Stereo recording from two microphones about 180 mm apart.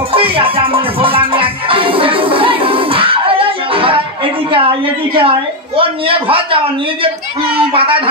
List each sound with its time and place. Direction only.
0.1 s music: 30° right (ahead or behind)
7.5 s speech: 30° right (ahead or behind)